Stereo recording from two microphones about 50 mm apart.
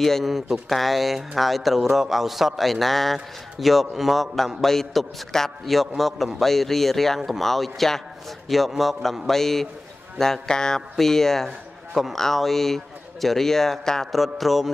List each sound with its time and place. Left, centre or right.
0.2 s speech: centre